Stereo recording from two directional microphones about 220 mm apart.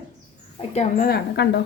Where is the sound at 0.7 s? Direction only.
40° left (ahead or behind).